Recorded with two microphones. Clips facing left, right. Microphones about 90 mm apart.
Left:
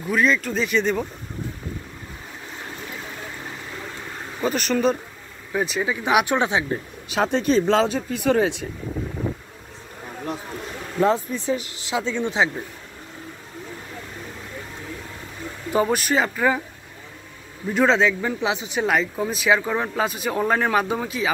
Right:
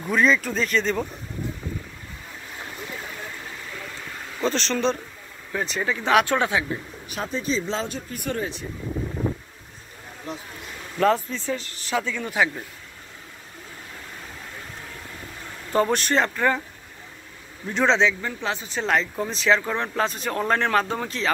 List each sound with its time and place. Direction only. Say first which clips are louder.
0.0 s speech: even; centre (ahead or behind)
4.4 s speech: left 2 dB; 10° left (ahead or behind)
7.1 s speech: left 7 dB; 80° left
8.4 s speech: left 9 dB; 80° left
11.0 s speech: left 1 dB; 20° left (ahead or behind)
15.7 s speech: left 1 dB; 10° left (ahead or behind)
17.6 s speech: left 2 dB; 5° left (ahead or behind)